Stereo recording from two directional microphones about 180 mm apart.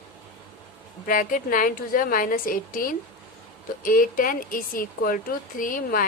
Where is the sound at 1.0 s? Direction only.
50° left (ahead or behind).